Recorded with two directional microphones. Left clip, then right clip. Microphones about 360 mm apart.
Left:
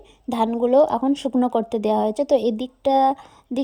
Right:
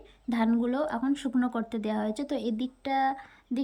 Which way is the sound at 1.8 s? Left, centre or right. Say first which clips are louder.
Left 12 dB; centre.